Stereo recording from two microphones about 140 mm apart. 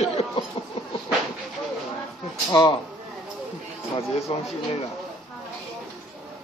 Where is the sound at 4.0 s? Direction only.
45° left (ahead or behind).